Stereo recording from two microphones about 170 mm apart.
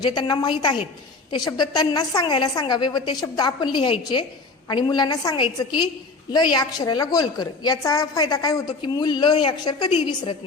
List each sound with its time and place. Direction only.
0.0 s a woman's voice: 25° left (ahead or behind)